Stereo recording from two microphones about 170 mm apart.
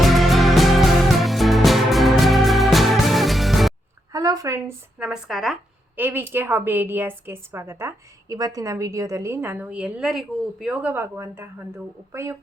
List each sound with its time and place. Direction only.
0.0 s music: centre (ahead or behind)
4.1 s speech: 20° right (ahead or behind); by 5.5 s centre (ahead or behind)
6.0 s a woman's voice: 10° right (ahead or behind)